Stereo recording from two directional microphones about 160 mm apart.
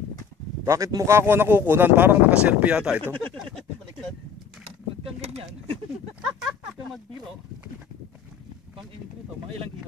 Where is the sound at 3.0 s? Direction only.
10° left (ahead or behind).